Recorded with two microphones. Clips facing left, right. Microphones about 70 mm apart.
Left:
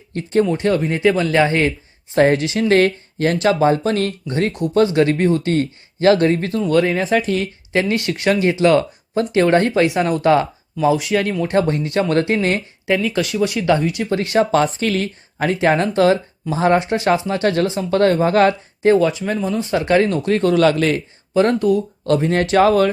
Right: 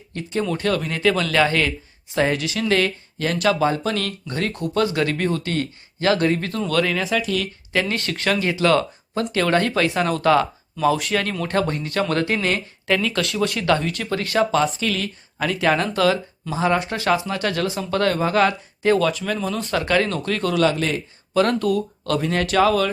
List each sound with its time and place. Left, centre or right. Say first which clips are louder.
0.1 s speech: left 8 dB; left
0.4 s speech: left 5 dB; left
2.1 s speech: left 7 dB; left
2.4 s speech: left 6 dB; left
7.9 s speech: left 5 dB; centre
10.8 s speech: left 3 dB; centre; by 12.6 s left
12.9 s speech: left 3 dB; centre
14.1 s speech: left 4 dB; left
14.5 s speech: left 4 dB; left
16.7 s speech: left 4 dB; left
20.7 s speech: left 5 dB; left
21.3 s speech: left 4 dB; left